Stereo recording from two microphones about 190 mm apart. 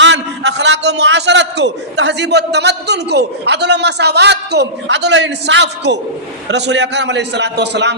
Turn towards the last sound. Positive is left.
turn(degrees=-65)  # may be behind; listen again after turning